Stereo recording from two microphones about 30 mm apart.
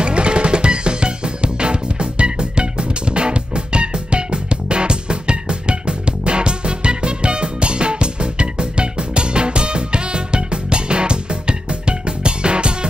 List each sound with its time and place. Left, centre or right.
0.0 s music: right